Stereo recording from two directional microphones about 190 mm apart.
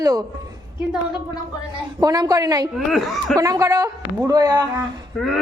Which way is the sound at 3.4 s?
15° right (ahead or behind).